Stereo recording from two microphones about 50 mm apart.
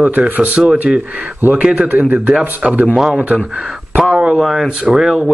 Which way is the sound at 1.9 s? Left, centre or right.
Right.